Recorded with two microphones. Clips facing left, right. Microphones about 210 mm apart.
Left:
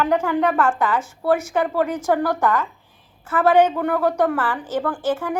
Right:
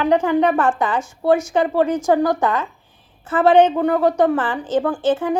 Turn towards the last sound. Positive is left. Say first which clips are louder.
# right 4 dB
turn(degrees=-20)  # may be behind; listen again after turning